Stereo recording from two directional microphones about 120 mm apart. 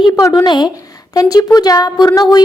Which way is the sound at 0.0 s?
25° left (ahead or behind).